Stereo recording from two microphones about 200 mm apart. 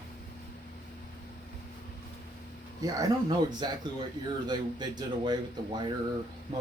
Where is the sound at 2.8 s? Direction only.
20° right (ahead or behind).